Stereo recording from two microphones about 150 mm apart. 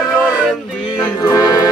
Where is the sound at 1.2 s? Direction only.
25° left (ahead or behind).